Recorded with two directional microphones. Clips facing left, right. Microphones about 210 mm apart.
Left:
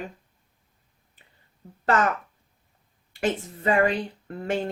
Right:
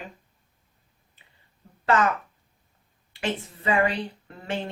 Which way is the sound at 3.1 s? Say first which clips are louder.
Left 3 dB; 45° left (ahead or behind).